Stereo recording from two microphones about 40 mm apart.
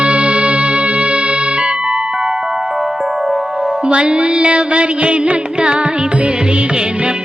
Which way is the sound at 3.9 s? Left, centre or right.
Right.